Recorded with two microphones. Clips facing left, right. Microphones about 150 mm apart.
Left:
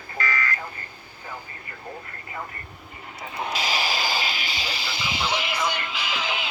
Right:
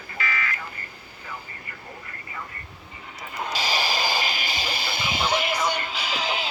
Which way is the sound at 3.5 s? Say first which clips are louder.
Right 1 dB; 40° right (ahead or behind).